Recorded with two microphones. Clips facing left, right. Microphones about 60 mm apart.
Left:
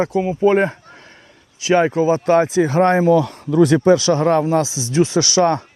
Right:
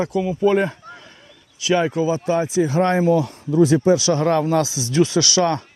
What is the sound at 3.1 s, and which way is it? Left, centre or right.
Speech, left.